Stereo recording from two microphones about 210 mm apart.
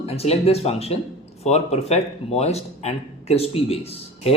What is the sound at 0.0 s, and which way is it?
Speech, 30° left (ahead or behind).